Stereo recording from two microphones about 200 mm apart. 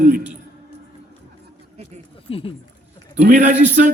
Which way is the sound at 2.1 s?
30° left (ahead or behind).